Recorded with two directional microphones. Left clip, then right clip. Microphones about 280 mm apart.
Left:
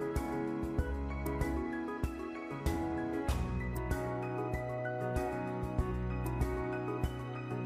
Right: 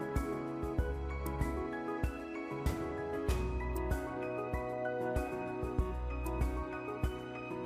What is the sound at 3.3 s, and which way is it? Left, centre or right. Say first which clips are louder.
Music: right 2 dB; centre.